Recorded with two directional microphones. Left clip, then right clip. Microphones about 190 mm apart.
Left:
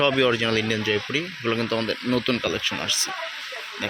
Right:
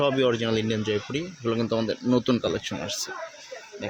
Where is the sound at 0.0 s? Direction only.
10° right (ahead or behind).